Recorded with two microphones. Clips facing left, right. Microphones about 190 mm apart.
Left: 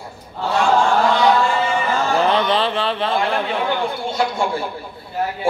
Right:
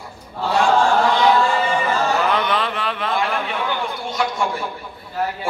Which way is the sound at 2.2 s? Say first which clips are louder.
Left 3 dB; 30° left (ahead or behind).